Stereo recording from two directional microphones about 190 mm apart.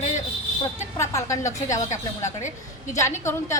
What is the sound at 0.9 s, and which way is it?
A woman's voice, 15° left (ahead or behind).